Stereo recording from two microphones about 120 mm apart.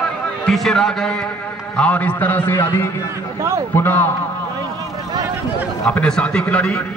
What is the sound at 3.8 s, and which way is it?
Speech, 15° left (ahead or behind).